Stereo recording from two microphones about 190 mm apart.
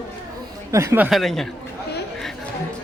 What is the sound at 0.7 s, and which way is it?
Speech, 15° right (ahead or behind).